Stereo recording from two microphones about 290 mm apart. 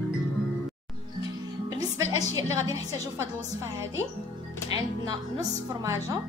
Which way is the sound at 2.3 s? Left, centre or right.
Centre.